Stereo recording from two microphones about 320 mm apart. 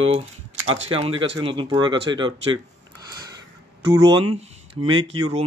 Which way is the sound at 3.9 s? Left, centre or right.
Centre.